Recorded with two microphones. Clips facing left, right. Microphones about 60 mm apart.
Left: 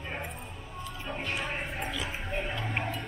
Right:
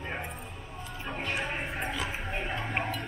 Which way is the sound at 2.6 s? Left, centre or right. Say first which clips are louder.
Right 1 dB; centre.